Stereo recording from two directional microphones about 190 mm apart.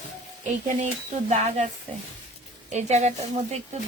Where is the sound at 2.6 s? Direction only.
35° right (ahead or behind).